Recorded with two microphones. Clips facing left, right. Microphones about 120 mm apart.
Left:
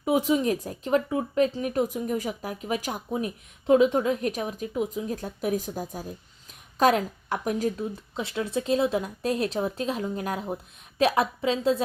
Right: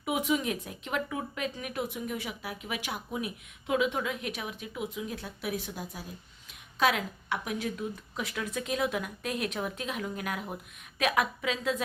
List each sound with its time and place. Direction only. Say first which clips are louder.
0.0 s speech: left 6 dB; 35° left (ahead or behind)
8.1 s speech: left 9 dB; 25° left (ahead or behind)